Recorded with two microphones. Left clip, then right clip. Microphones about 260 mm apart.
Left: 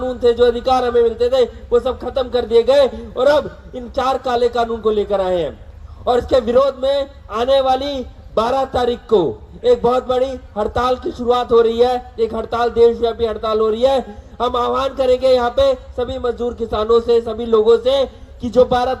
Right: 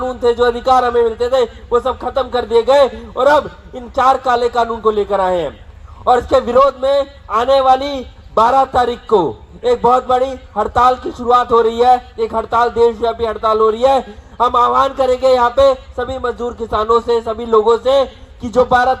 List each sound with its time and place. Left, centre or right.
0.0 s a man's voice: right